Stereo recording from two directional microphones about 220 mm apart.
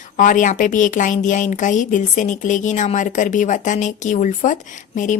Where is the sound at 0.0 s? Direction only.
35° left (ahead or behind).